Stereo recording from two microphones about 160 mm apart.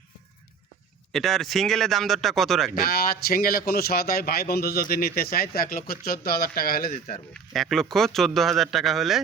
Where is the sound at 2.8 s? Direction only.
70° left (ahead or behind).